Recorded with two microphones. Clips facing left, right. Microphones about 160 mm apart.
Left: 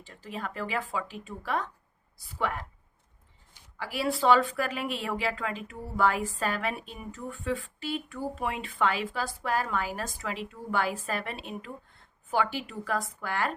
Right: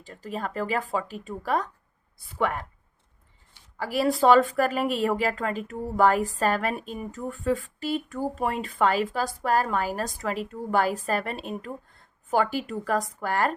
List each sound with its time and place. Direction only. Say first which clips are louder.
0.0 s a woman's voice: right 5 dB; 40° right (ahead or behind)
2.1 s a woman's voice: right 5 dB; 55° right (ahead or behind)
3.8 s a woman's voice: right 6 dB; 40° right (ahead or behind)